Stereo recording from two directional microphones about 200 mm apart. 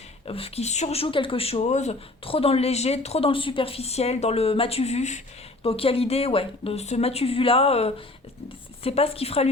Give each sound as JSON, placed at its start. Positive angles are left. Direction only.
{"t": 0.3, "sound": "a woman's voice", "side_deg": 30}